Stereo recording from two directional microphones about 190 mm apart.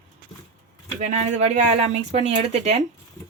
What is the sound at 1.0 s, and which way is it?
Speech, 40° right (ahead or behind).